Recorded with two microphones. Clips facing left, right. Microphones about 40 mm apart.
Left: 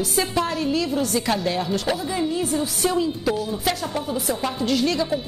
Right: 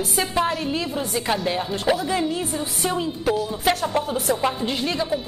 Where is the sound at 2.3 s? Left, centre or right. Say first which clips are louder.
Left 3 dB; right.